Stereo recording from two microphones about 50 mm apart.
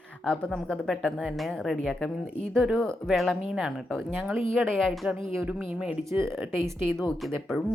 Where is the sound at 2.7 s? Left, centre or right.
Centre.